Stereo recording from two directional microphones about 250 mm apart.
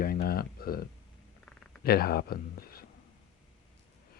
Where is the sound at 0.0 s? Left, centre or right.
Left.